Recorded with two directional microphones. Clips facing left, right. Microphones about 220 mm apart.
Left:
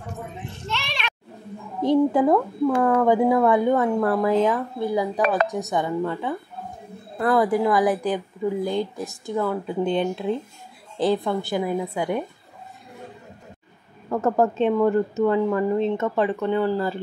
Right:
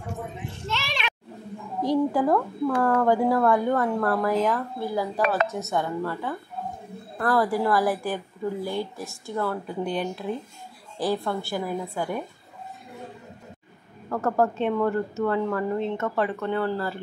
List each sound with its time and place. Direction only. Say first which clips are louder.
0.7 s children playing: even; 5° right (ahead or behind)
1.8 s a woman's voice: left 4 dB; 25° left (ahead or behind)
14.0 s speech: left 3 dB; 15° left (ahead or behind)